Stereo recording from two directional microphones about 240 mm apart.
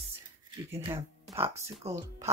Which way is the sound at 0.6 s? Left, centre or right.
Centre.